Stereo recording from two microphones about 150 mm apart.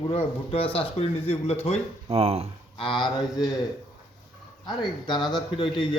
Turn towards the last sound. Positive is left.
turn(degrees=30)  # may be behind; listen again after turning